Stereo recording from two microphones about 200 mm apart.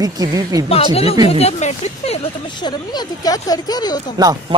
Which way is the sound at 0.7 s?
30° left (ahead or behind).